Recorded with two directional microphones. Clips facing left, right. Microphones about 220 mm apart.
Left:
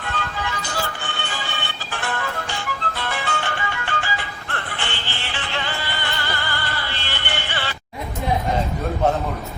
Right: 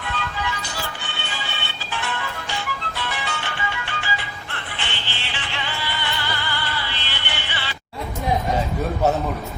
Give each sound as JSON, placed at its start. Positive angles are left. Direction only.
{"t": 0.0, "sound": "music", "side_deg": 50}